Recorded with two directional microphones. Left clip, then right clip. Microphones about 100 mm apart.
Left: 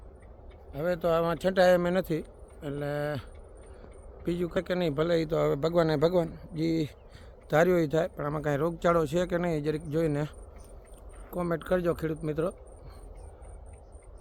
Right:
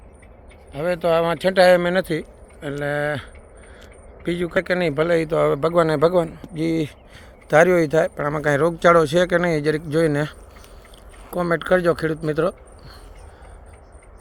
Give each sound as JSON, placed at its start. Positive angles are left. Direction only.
{"t": 0.7, "sound": "speech", "side_deg": -5}
{"t": 1.9, "sound": "speech", "side_deg": 5}
{"t": 4.3, "sound": "speech", "side_deg": -5}
{"t": 5.5, "sound": "a man's voice", "side_deg": 20}
{"t": 6.6, "sound": "speech", "side_deg": 5}
{"t": 8.4, "sound": "speech", "side_deg": -30}